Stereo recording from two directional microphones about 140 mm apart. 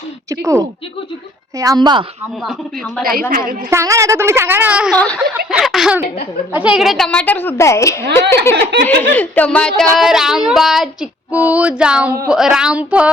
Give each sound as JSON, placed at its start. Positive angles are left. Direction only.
{"t": 0.3, "sound": "a woman's voice", "side_deg": -20}
{"t": 3.0, "sound": "a woman's voice", "side_deg": -90}
{"t": 3.7, "sound": "a woman's voice", "side_deg": -20}
{"t": 4.9, "sound": "a woman's voice", "side_deg": 5}
{"t": 5.5, "sound": "child singing", "side_deg": 0}
{"t": 6.5, "sound": "a woman's voice", "side_deg": -10}
{"t": 10.0, "sound": "child singing", "side_deg": 0}
{"t": 11.3, "sound": "speech", "side_deg": -10}
{"t": 12.3, "sound": "child singing", "side_deg": -5}